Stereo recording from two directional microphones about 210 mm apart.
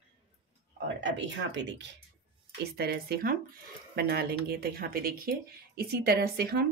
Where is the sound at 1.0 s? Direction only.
60° right (ahead or behind).